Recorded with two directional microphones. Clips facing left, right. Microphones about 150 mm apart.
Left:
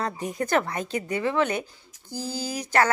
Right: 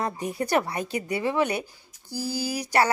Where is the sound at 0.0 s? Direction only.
10° right (ahead or behind).